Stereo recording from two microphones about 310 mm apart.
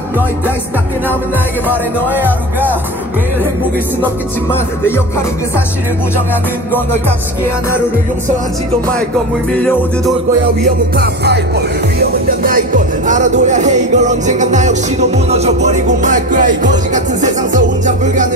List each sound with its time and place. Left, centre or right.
1.7 s speech: centre
4.5 s music: centre
9.5 s speech: centre
11.0 s music: right